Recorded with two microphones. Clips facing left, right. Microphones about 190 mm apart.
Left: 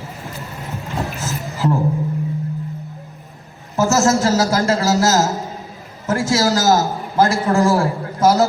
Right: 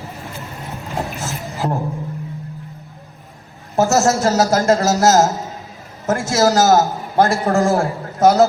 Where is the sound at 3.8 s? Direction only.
35° right (ahead or behind).